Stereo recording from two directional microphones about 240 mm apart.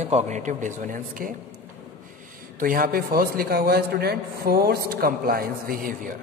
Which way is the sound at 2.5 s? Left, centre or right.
Right.